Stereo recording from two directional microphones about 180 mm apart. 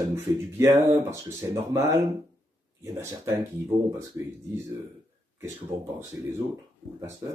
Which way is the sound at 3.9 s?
15° right (ahead or behind).